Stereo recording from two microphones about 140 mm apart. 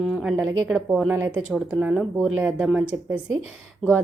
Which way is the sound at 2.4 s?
10° right (ahead or behind).